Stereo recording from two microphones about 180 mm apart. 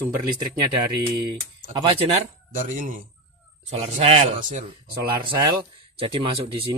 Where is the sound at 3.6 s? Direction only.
35° right (ahead or behind).